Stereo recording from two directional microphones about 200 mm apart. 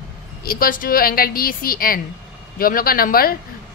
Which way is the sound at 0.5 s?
45° left (ahead or behind).